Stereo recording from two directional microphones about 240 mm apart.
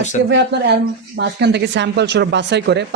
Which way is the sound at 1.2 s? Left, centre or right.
Right.